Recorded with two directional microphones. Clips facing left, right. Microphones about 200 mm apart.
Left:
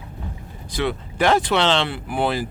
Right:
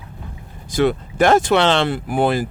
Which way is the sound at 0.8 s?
45° right (ahead or behind).